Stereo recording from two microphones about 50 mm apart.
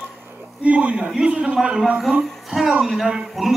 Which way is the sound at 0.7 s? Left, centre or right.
Right.